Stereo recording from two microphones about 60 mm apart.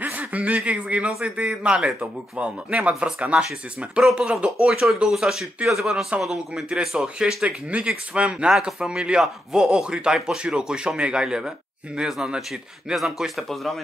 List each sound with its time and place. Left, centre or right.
0.0 s chuckle: right
0.7 s speech: right
7.4 s speech: centre
8.5 s speech: centre